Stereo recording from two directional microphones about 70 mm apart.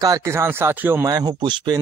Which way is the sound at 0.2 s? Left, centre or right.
Right.